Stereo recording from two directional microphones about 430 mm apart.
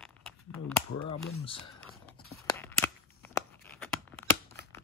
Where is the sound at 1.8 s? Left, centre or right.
Centre.